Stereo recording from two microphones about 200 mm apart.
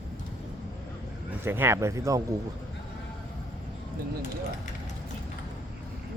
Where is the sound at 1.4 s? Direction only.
10° right (ahead or behind).